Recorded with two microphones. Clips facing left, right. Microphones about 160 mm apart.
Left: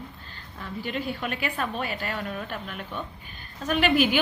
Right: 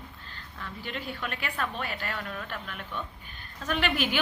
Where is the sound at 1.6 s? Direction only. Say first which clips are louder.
Left 3 dB; 15° left (ahead or behind).